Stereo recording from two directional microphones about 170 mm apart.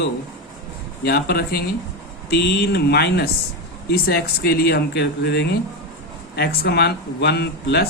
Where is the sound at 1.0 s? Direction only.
65° left (ahead or behind).